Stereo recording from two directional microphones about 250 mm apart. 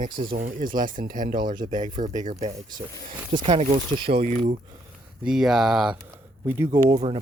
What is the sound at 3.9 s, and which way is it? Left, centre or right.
Speech, right.